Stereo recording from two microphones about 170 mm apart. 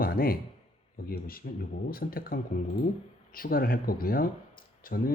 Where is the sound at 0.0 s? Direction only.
60° left (ahead or behind).